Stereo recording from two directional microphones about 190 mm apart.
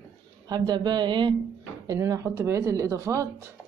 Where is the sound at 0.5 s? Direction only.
20° right (ahead or behind).